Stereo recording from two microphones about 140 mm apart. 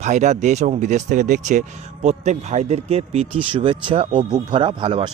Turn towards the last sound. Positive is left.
turn(degrees=-40)  # may be behind; listen again after turning